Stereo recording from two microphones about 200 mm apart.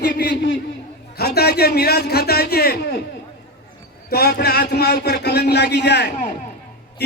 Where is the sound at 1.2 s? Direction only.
50° left (ahead or behind).